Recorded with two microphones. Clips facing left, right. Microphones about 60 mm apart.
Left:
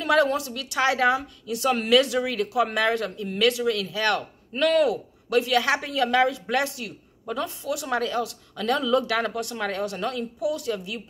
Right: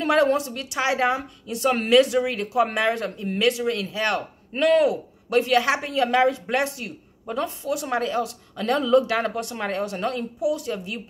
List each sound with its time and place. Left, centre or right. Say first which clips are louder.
0.0 s a woman's voice: right 2 dB; right